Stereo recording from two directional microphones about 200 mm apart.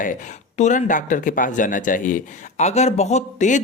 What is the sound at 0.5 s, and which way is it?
Speech, 35° left (ahead or behind).